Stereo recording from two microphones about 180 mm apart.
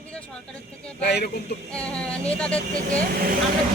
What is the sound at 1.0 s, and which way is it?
Speech, 60° left (ahead or behind).